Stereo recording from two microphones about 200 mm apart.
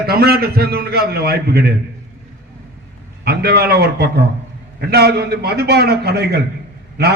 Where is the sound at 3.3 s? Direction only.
50° right (ahead or behind).